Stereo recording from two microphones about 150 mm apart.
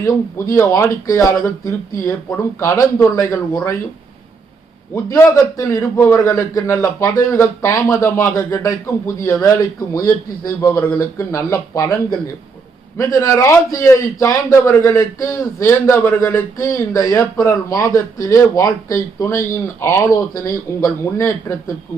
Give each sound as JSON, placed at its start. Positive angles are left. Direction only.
{"t": 0.0, "sound": "a man's voice", "side_deg": 20}
{"t": 5.0, "sound": "a man's voice", "side_deg": 20}
{"t": 13.0, "sound": "a man's voice", "side_deg": 20}